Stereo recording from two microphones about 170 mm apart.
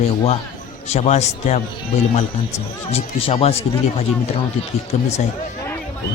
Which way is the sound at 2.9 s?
35° left (ahead or behind).